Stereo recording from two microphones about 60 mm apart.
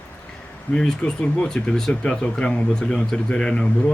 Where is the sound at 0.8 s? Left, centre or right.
Centre.